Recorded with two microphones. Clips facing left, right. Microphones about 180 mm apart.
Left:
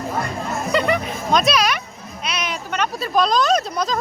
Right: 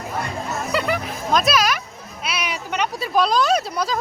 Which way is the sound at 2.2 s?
10° right (ahead or behind).